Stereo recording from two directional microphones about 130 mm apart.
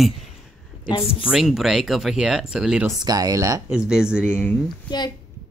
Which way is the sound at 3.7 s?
5° right (ahead or behind).